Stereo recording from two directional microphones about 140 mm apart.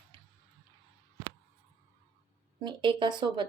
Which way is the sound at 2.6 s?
35° right (ahead or behind).